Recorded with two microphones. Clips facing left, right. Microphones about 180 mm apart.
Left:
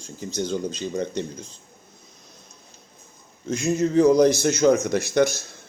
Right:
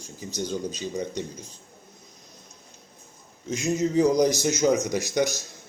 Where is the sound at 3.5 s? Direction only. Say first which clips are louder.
Left 3 dB; 15° right (ahead or behind).